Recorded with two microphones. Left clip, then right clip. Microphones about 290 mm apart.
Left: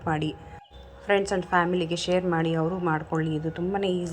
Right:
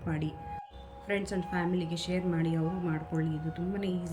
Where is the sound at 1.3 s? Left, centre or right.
Left.